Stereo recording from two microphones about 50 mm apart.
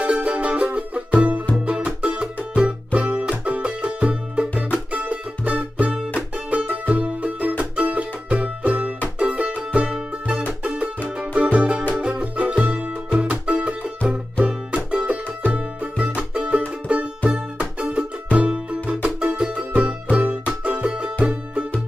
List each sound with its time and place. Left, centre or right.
0.0 s music: right
11.1 s music: right